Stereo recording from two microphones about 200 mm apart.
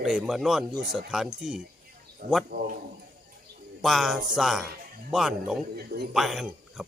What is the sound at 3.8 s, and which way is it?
Speech, centre (ahead or behind).